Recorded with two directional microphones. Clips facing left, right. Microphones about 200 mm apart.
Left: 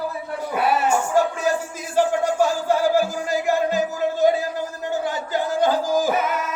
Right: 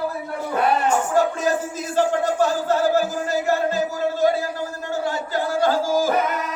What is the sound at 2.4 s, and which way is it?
Music, 10° left (ahead or behind).